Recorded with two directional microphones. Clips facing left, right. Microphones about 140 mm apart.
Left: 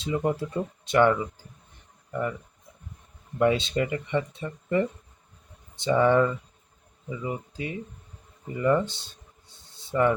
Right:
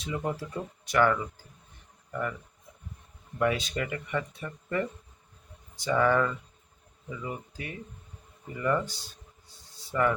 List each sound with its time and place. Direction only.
0.0 s speech: 25° left (ahead or behind)
3.3 s speech: 25° left (ahead or behind)
9.7 s a sound: 25° left (ahead or behind)